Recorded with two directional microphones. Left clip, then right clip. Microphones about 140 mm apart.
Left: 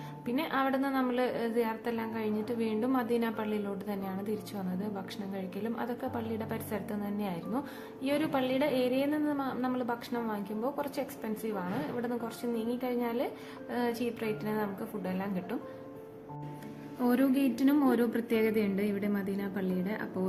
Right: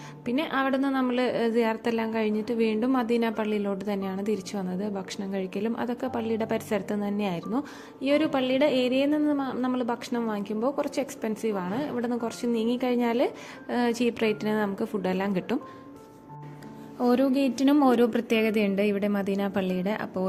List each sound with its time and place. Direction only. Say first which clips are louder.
0.3 s a woman's voice: right 4 dB; 40° right (ahead or behind)
8.0 s a woman's voice: right 6 dB; 35° right (ahead or behind); by 15.5 s 60° right (ahead or behind)
17.0 s a woman's voice: right 5 dB; 20° right (ahead or behind); by 20.1 s 45° right (ahead or behind)